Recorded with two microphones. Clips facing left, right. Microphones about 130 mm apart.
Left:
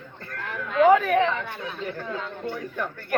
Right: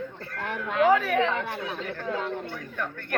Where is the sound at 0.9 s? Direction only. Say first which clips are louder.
Left 4 dB; centre (ahead or behind).